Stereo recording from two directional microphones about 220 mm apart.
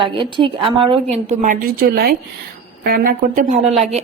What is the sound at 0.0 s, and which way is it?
A woman's voice, 20° right (ahead or behind).